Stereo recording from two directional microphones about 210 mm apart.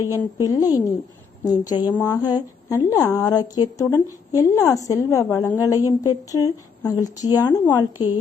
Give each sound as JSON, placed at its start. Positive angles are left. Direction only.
{"t": 0.0, "sound": "a woman's voice", "side_deg": -10}
{"t": 0.4, "sound": "a woman's voice", "side_deg": 15}